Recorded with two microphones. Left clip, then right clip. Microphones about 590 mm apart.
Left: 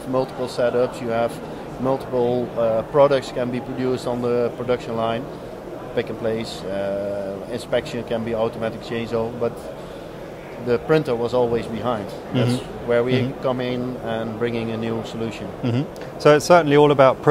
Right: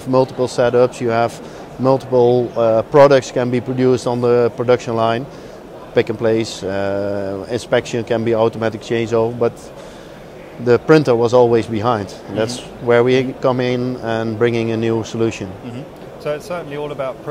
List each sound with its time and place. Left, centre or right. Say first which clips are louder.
0.1 s a man's voice: right 8 dB; right
10.7 s a man's voice: right 8 dB; right
15.6 s speech: left 5 dB; left